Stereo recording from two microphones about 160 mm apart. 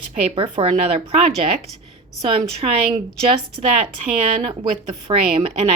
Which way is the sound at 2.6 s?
35° right (ahead or behind).